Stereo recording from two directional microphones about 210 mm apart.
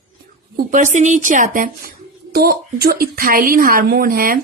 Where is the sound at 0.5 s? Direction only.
35° right (ahead or behind).